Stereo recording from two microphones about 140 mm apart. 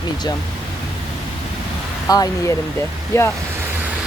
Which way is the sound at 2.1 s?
25° left (ahead or behind).